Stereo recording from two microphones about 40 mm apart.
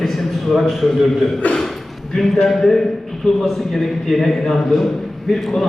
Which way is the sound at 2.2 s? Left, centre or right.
Centre.